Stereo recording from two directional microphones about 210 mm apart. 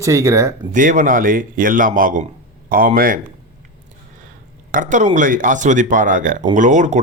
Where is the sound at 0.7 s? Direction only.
35° right (ahead or behind).